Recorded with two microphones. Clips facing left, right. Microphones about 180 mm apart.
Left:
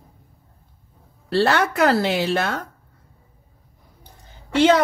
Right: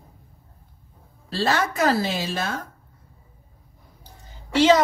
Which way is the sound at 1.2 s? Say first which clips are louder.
Left 5 dB; 65° left (ahead or behind).